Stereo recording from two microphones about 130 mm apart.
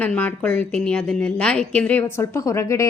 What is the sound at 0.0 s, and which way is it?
A woman's voice, 15° left (ahead or behind).